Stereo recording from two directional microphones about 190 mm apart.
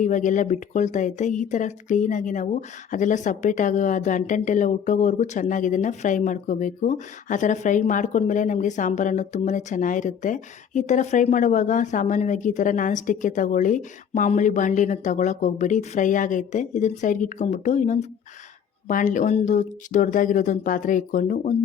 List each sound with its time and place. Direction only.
0.0 s speech: 40° left (ahead or behind)